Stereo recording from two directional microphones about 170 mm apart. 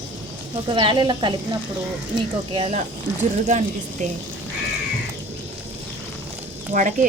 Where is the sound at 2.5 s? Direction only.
35° right (ahead or behind).